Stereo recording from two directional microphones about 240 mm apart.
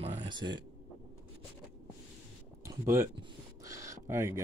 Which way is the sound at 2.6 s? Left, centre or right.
Centre.